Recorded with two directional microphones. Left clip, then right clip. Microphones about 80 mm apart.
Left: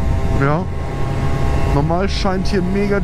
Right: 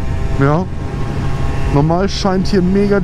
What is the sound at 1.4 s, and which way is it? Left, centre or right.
Vehicle, left.